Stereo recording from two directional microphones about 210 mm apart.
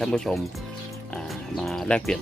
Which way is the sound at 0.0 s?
Centre (ahead or behind).